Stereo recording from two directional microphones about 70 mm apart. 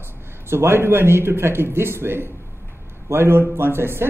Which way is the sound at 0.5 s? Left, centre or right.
Right.